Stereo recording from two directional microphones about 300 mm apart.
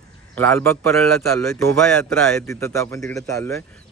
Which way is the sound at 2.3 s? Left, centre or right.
Centre.